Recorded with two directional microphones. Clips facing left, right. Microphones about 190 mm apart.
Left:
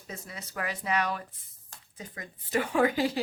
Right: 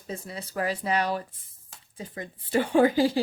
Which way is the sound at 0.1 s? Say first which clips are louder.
Right 6 dB; 30° right (ahead or behind).